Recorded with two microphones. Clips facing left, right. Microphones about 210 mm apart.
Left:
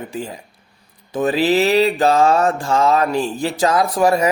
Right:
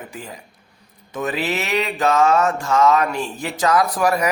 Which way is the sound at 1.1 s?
30° left (ahead or behind).